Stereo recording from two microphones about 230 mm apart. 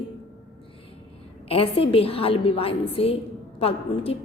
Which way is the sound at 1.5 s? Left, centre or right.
Left.